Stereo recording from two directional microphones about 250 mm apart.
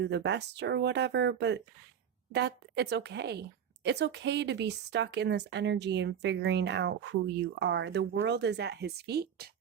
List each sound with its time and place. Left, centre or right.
0.0 s a woman's voice: right